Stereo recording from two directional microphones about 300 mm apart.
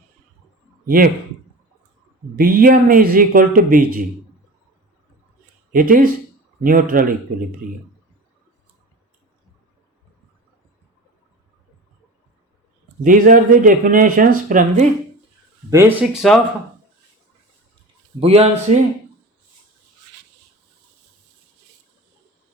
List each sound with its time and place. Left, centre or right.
0.9 s speech: right
2.4 s speech: right
5.7 s speech: right
13.0 s speech: right
15.7 s speech: centre
18.2 s speech: centre